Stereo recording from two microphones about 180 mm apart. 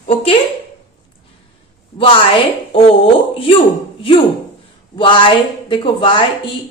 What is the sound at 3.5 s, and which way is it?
A woman's voice, 30° left (ahead or behind).